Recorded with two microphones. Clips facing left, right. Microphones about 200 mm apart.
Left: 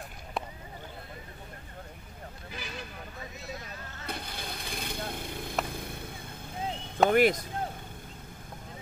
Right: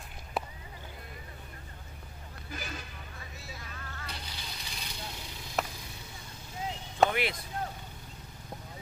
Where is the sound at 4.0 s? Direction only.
55° left (ahead or behind).